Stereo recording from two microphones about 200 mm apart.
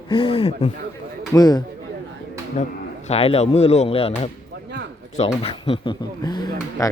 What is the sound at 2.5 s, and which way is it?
Speech, 35° left (ahead or behind).